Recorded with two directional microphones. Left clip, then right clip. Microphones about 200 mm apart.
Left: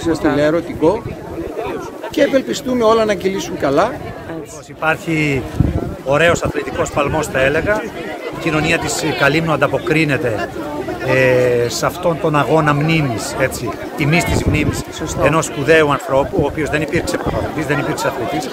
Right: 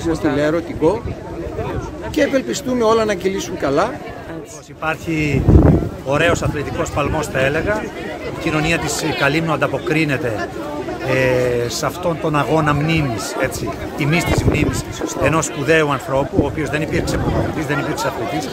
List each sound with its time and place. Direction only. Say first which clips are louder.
0.0 s speech: left 3 dB; 20° left (ahead or behind)
0.4 s speech: left 2 dB; centre (ahead or behind)
2.1 s speech: left 3 dB; 5° right (ahead or behind)